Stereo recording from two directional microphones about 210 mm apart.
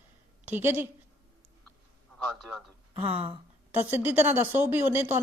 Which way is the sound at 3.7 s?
10° right (ahead or behind).